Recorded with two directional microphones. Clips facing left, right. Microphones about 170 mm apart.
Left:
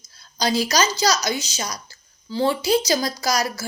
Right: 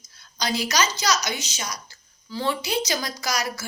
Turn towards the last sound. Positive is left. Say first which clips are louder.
# left 5 dB
turn(degrees=35)  # may be behind; listen again after turning